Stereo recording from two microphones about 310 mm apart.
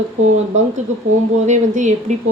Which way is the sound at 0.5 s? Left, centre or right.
Right.